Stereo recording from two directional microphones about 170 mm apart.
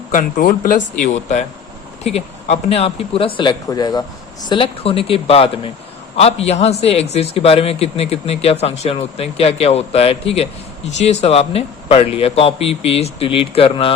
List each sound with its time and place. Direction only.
0.1 s speech: 55° left (ahead or behind)
1.0 s a man's voice: 45° left (ahead or behind)